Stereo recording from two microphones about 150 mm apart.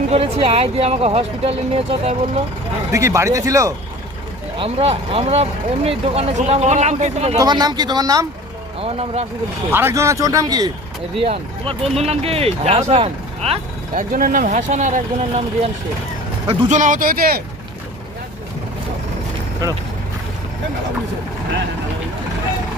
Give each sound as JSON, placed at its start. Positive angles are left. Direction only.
{"t": 0.1, "sound": "speech", "side_deg": -40}
{"t": 2.9, "sound": "speech", "side_deg": -20}
{"t": 4.5, "sound": "speech", "side_deg": -40}
{"t": 7.3, "sound": "speech", "side_deg": -25}
{"t": 8.8, "sound": "speech", "side_deg": -40}
{"t": 9.7, "sound": "speech", "side_deg": -15}
{"t": 11.2, "sound": "speech", "side_deg": -40}
{"t": 13.9, "sound": "speech", "side_deg": -65}
{"t": 16.6, "sound": "speech", "side_deg": -60}